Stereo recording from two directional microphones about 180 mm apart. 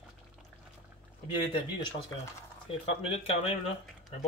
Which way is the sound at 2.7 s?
30° left (ahead or behind).